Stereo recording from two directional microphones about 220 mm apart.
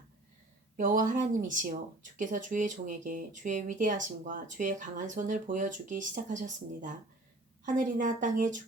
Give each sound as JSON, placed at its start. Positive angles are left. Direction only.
{"t": 0.8, "sound": "speech", "side_deg": -40}